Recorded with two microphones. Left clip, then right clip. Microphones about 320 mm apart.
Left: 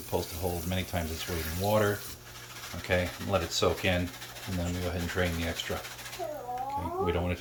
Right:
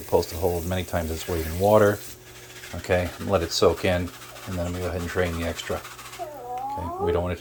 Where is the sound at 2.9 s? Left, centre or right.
Right.